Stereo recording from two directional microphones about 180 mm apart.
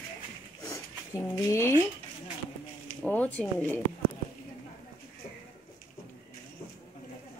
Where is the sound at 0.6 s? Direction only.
15° left (ahead or behind).